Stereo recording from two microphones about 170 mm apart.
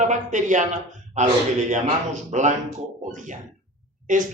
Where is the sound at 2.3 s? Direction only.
40° right (ahead or behind).